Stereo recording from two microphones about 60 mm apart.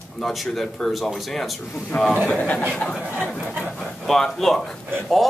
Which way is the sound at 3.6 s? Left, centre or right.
Centre.